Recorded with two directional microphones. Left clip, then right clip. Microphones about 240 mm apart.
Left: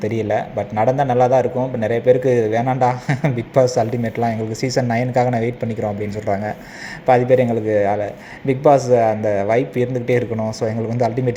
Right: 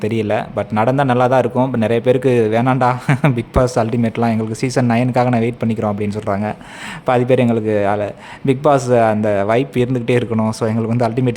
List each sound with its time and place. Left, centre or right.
0.0 s a man's voice: centre